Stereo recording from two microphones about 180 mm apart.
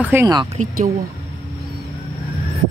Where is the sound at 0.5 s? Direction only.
45° right (ahead or behind).